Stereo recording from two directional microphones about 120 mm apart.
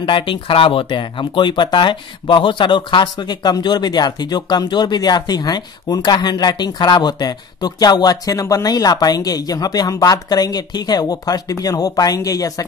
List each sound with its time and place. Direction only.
0.0 s speech: 45° left (ahead or behind)